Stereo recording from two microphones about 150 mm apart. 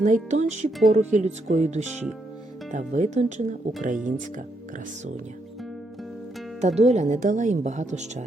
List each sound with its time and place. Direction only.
0.0 s speech: 55° right (ahead or behind)
3.8 s speech: 60° right (ahead or behind)
6.6 s speech: 45° right (ahead or behind)